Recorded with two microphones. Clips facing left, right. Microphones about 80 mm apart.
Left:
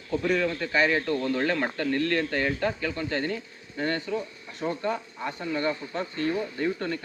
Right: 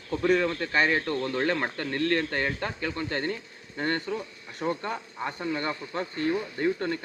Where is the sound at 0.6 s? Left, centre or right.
Right.